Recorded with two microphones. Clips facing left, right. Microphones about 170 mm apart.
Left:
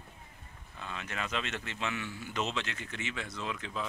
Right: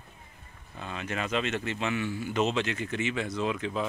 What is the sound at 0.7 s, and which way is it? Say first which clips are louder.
Speech: right 5 dB; 45° right (ahead or behind).